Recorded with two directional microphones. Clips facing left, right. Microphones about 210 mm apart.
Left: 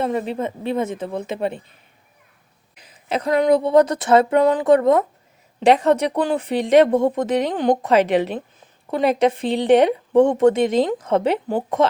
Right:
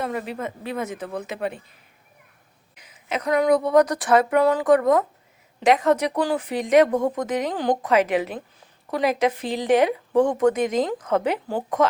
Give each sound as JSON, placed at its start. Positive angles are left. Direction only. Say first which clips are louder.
{"t": 0.0, "sound": "speech", "louder": "left 5 dB", "side_deg": 25}
{"t": 2.8, "sound": "speech", "louder": "left 3 dB", "side_deg": 30}